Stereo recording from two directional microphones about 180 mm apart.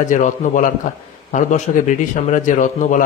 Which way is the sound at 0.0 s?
45° left (ahead or behind).